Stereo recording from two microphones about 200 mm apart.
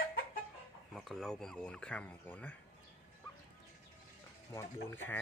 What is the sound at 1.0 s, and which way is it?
Speech, centre (ahead or behind).